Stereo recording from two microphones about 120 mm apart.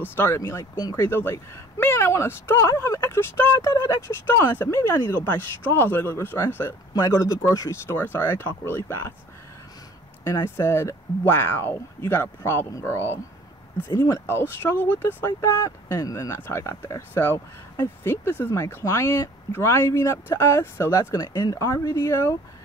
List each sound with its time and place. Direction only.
0.0 s speech: 20° left (ahead or behind)
6.9 s speech: 30° left (ahead or behind)
10.2 s speech: 20° left (ahead or behind)
15.6 s speech: 30° left (ahead or behind)